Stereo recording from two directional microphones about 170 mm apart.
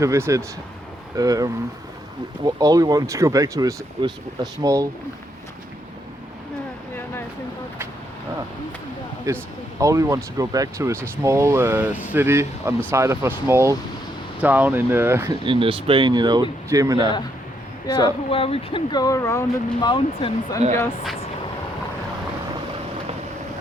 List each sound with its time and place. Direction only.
0.0 s speech: 15° right (ahead or behind)
2.6 s speech: 20° right (ahead or behind)
9.3 s speech: 15° right (ahead or behind)
15.4 s speech: 30° right (ahead or behind)
17.8 s speech: 25° left (ahead or behind)
19.9 s speech: 30° left (ahead or behind)